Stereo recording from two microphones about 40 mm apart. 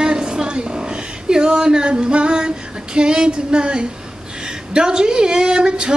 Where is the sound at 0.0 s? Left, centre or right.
Centre.